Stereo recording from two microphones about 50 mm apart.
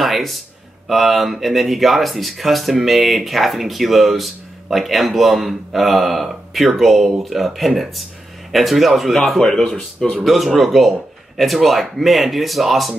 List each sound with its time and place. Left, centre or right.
0.0 s music: centre
0.8 s speech: centre
9.4 s speech: centre
10.2 s speech: centre